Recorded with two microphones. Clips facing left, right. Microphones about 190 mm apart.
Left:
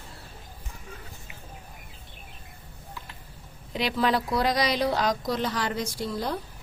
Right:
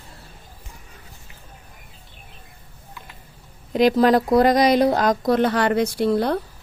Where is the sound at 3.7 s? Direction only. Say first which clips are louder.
Right 10 dB; 45° right (ahead or behind); by 6.4 s 65° right (ahead or behind).